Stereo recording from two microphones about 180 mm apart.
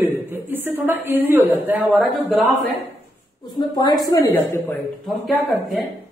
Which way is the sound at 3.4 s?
25° left (ahead or behind).